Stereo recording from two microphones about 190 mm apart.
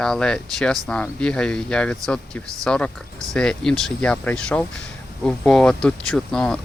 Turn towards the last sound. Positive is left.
turn(degrees=5)  # may be behind; listen again after turning